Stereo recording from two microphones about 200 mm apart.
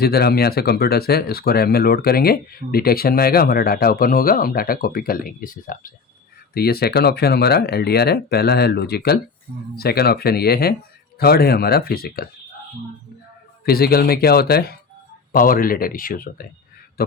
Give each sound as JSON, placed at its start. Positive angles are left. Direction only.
{"t": 0.0, "sound": "speech", "side_deg": 50}
{"t": 13.7, "sound": "a man's voice", "side_deg": 50}